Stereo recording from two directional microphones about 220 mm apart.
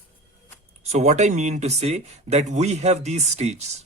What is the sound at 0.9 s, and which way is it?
Speech, 30° right (ahead or behind).